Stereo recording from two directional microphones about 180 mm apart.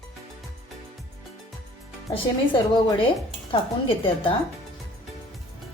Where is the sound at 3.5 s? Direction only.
30° left (ahead or behind).